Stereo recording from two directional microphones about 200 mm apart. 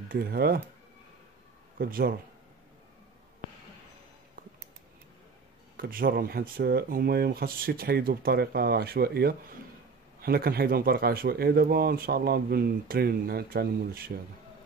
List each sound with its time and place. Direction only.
0.1 s speech: 50° right (ahead or behind)
1.8 s speech: 45° right (ahead or behind)
5.8 s speech: 45° right (ahead or behind)